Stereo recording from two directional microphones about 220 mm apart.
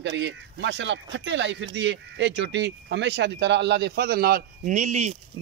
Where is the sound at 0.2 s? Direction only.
55° right (ahead or behind).